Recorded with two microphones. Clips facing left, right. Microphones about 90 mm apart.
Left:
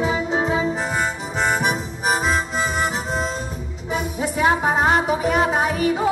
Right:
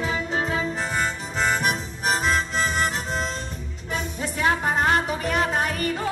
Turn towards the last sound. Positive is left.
turn(degrees=10)  # may be behind; listen again after turning